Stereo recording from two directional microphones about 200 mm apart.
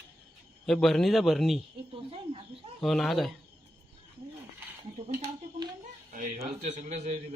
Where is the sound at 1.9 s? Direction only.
25° right (ahead or behind).